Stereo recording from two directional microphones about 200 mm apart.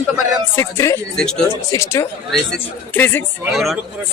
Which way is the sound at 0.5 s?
15° left (ahead or behind).